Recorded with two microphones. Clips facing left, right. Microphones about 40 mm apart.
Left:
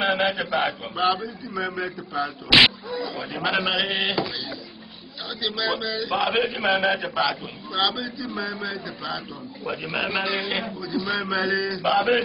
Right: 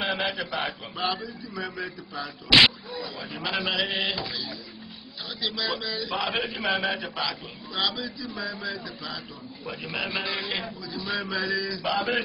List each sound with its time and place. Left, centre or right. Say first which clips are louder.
0.0 s a man's voice: left 5 dB; left
3.2 s a man's voice: left 5 dB; left
8.5 s mantra: left 3 dB; centre
8.8 s a man's voice: left 5 dB; centre